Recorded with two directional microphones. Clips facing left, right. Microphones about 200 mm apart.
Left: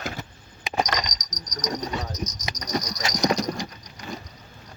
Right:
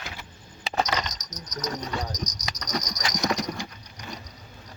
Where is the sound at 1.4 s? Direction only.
15° left (ahead or behind).